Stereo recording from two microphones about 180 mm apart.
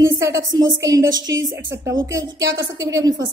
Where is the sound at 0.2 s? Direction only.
20° right (ahead or behind).